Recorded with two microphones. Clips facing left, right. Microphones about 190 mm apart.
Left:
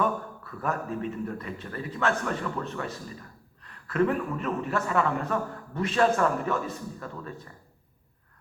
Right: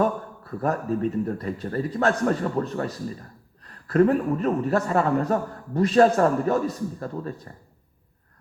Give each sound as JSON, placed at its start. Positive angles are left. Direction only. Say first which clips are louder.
{"t": 0.0, "sound": "a man's voice", "louder": "right 4 dB", "side_deg": -40}